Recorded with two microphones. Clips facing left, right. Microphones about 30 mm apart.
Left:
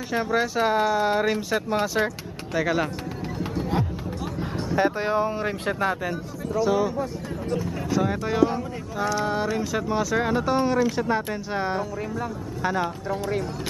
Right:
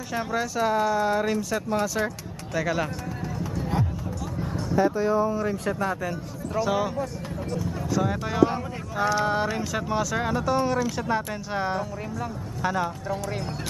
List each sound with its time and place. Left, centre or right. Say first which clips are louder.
0.1 s speech: left 4 dB; centre
2.5 s speech: left 2 dB; centre
3.7 s a sound: left 1 dB; left
4.7 s speech: right 1 dB; left
6.6 s speech: left 3 dB; centre
7.9 s speech: left 2 dB; centre
8.5 s speech: left 1 dB; centre
10.3 s speech: even; centre